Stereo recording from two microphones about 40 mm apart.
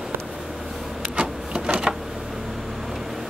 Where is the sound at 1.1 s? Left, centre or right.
Right.